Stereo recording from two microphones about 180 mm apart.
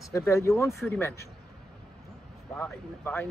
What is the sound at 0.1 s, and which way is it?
Speech, 15° left (ahead or behind).